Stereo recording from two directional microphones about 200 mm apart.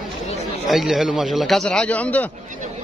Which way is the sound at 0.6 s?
Centre (ahead or behind).